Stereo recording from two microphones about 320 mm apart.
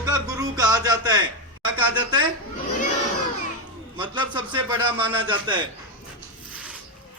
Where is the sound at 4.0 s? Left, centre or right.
Centre.